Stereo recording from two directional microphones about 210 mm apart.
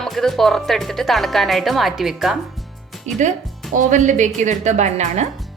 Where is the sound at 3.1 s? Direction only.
35° right (ahead or behind).